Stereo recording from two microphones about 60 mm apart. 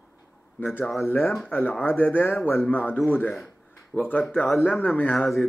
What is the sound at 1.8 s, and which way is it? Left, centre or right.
Speech, left.